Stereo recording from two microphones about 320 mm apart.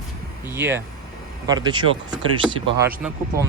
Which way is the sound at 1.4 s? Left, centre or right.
Centre.